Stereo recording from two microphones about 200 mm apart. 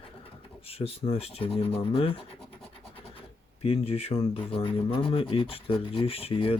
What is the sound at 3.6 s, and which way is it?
Speech, 30° left (ahead or behind).